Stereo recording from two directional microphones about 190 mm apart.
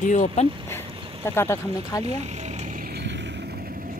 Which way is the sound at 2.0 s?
35° right (ahead or behind).